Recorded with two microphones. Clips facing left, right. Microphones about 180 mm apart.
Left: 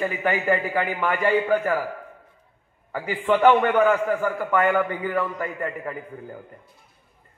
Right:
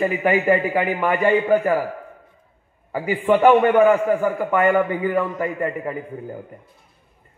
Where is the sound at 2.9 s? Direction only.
15° right (ahead or behind).